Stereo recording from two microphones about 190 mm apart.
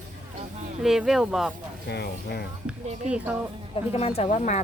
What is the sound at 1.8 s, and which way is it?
Speech, 60° left (ahead or behind).